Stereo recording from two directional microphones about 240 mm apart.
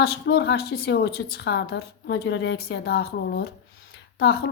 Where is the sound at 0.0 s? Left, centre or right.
Left.